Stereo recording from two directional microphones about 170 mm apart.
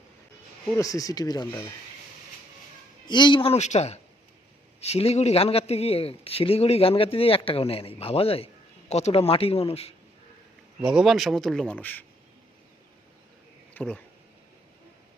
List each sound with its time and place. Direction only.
0.8 s speech: 20° left (ahead or behind)
3.1 s a man's voice: 25° left (ahead or behind)
10.8 s a man's voice: 5° right (ahead or behind)
13.7 s speech: 5° left (ahead or behind)